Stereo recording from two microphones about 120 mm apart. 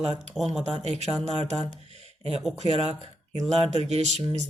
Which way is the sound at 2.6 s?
60° right (ahead or behind).